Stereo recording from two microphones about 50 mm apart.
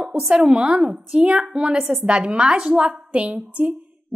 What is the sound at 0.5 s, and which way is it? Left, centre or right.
A woman's voice, right.